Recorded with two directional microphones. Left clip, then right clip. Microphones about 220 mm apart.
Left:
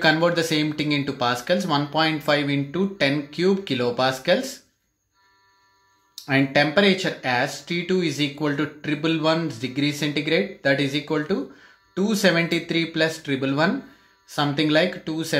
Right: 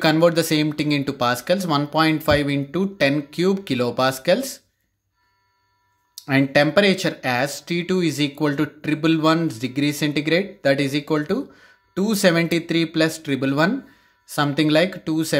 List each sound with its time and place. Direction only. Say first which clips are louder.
0.0 s speech: right 2 dB; 35° right (ahead or behind)
6.1 s speech: right 2 dB; 40° right (ahead or behind)